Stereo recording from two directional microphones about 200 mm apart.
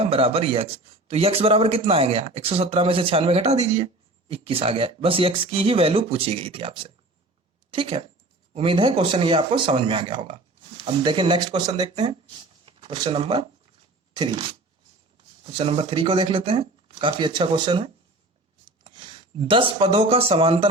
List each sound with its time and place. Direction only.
0.0 s a man's voice: 30° right (ahead or behind)
15.5 s a man's voice: 25° right (ahead or behind)